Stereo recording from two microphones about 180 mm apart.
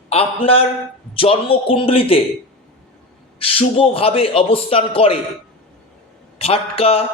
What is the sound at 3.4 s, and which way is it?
A man's voice, 30° left (ahead or behind).